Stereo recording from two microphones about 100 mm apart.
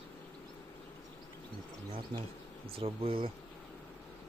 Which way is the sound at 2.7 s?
65° right (ahead or behind).